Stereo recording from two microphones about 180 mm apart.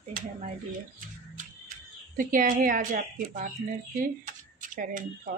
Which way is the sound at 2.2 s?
50° right (ahead or behind).